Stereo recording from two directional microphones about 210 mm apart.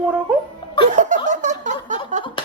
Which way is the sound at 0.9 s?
35° right (ahead or behind).